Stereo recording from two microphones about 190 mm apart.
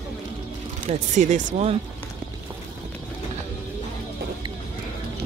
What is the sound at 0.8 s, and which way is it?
Speech, 40° right (ahead or behind).